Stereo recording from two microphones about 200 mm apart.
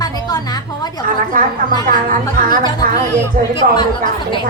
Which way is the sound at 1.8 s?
40° right (ahead or behind).